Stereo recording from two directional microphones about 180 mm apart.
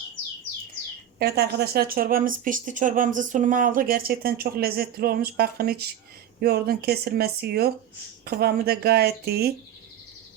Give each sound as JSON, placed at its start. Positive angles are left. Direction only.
{"t": 1.2, "sound": "speech", "side_deg": -60}